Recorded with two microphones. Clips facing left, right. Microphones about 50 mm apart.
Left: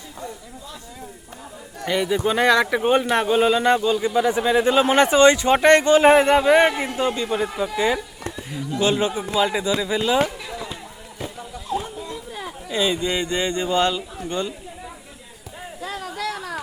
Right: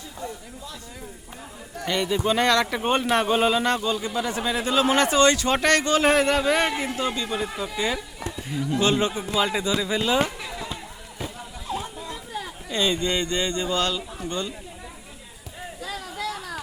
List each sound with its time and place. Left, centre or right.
1.8 s a man's voice: centre
8.4 s a man's voice: centre
12.6 s speech: centre